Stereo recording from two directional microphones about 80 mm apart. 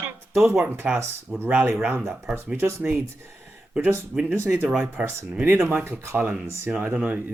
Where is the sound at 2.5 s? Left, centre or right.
Right.